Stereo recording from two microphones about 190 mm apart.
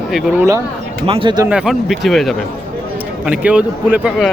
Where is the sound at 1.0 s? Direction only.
30° right (ahead or behind).